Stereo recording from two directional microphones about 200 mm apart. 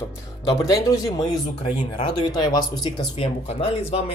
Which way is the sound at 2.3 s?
20° left (ahead or behind).